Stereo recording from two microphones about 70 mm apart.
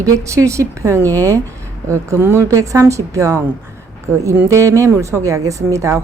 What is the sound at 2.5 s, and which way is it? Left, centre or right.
Speech, right.